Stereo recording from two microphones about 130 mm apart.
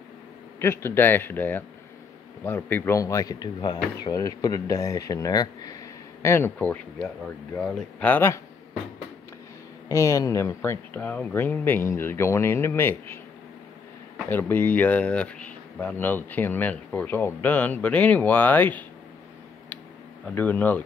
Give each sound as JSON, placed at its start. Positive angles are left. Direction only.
{"t": 0.6, "sound": "speech", "side_deg": 20}
{"t": 6.2, "sound": "speech", "side_deg": 20}
{"t": 9.8, "sound": "speech", "side_deg": 25}
{"t": 20.2, "sound": "speech", "side_deg": 10}